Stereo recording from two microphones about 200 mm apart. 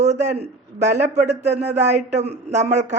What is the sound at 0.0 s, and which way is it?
A man's voice, 35° right (ahead or behind).